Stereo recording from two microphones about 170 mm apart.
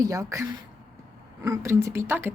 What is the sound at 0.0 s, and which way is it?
Speech, 20° right (ahead or behind).